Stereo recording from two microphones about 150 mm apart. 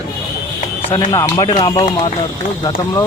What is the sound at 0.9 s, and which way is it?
Speech, 20° left (ahead or behind).